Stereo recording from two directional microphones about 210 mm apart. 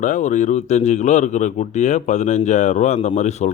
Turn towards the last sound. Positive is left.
turn(degrees=30)  # may be behind; listen again after turning